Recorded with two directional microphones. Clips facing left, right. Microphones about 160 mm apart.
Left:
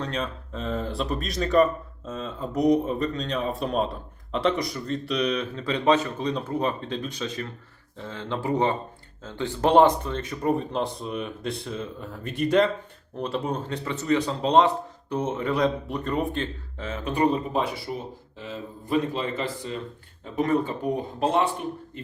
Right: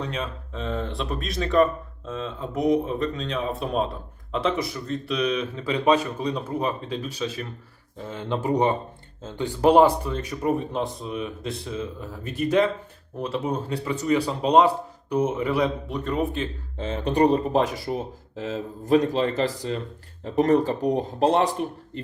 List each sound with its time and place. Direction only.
0.0 s speech: 5° right (ahead or behind)
8.0 s speech: 20° right (ahead or behind); by 16.5 s centre (ahead or behind)
16.7 s speech: 30° right (ahead or behind)